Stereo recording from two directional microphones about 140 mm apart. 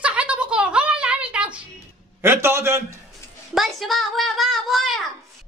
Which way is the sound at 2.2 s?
20° right (ahead or behind).